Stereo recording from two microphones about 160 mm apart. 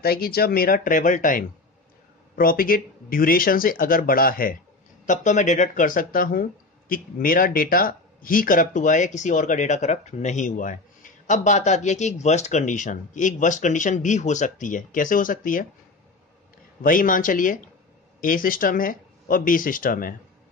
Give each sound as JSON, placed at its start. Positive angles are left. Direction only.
{"t": 0.0, "sound": "speech", "side_deg": 70}
{"t": 5.0, "sound": "speech", "side_deg": 50}
{"t": 16.8, "sound": "speech", "side_deg": 60}